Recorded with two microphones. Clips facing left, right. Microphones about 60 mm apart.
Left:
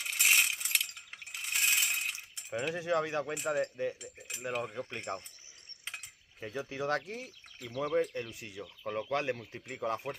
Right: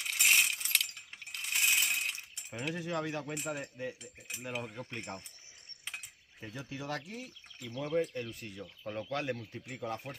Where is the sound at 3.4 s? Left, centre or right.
Left.